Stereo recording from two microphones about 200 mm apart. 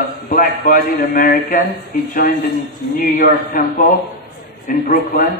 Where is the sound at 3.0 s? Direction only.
45° left (ahead or behind).